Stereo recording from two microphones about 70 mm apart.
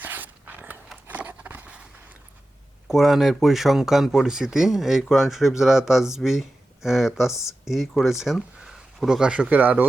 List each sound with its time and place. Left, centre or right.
0.0 s dog: right
1.0 s a sound: right
2.8 s speech: centre; by 9.8 s right